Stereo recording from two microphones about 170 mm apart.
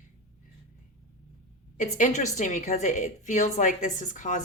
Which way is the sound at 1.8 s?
45° left (ahead or behind).